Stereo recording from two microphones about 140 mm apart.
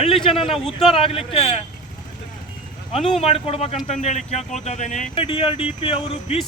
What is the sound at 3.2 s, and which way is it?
Speech, 45° left (ahead or behind).